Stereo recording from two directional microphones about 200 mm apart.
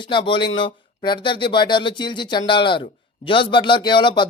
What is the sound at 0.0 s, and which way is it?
Speech, 25° left (ahead or behind).